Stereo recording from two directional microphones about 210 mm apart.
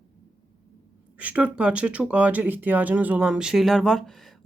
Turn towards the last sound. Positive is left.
turn(degrees=0)  # may be behind; listen again after turning